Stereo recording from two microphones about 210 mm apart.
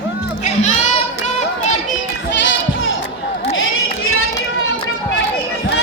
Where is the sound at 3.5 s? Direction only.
75° left (ahead or behind).